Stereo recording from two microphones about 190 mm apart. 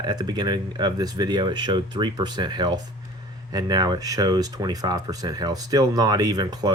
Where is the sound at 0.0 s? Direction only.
20° right (ahead or behind).